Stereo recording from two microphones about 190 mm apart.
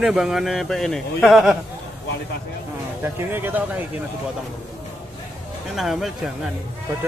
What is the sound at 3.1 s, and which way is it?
Speech, 10° right (ahead or behind).